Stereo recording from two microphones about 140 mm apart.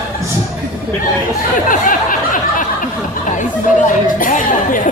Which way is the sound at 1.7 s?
75° left (ahead or behind).